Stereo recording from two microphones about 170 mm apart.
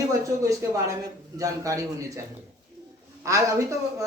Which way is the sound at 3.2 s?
20° right (ahead or behind).